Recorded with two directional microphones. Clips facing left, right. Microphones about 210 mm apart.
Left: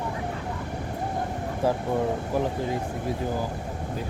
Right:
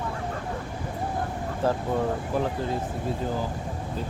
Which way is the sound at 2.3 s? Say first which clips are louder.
Left 1 dB; 15° left (ahead or behind).